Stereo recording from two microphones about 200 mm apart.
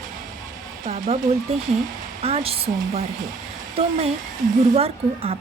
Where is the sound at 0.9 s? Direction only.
40° right (ahead or behind).